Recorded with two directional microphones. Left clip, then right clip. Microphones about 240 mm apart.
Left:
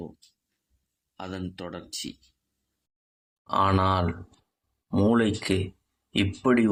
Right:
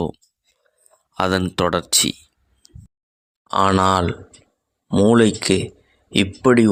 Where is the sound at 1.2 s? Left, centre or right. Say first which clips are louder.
Right 18 dB; right.